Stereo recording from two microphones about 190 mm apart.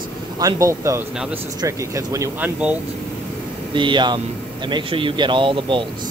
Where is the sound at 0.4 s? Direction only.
15° right (ahead or behind).